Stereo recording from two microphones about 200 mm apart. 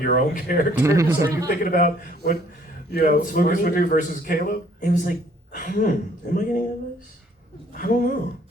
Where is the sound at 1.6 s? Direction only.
45° left (ahead or behind).